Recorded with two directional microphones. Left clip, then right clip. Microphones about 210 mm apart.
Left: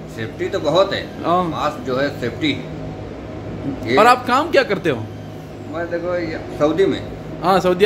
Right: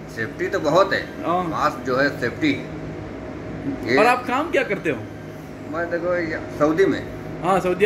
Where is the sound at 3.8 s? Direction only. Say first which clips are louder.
Left 5 dB; 20° left (ahead or behind).